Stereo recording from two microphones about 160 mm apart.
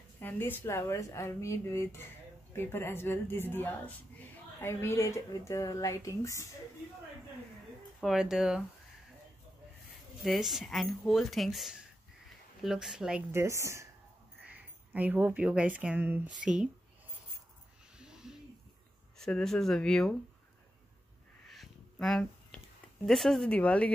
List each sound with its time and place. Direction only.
0.2 s a woman's voice: 10° left (ahead or behind)
8.0 s speech: 5° right (ahead or behind)
10.2 s speech: centre (ahead or behind)
13.3 s speech: 20° right (ahead or behind); by 16.6 s centre (ahead or behind)
17.9 s a sound: 5° right (ahead or behind)
19.1 s speech: 5° left (ahead or behind)
21.5 s crow: centre (ahead or behind)
23.0 s speech: centre (ahead or behind)